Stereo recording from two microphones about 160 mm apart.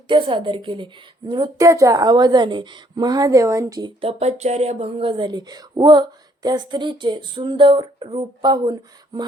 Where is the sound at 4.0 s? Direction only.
40° right (ahead or behind).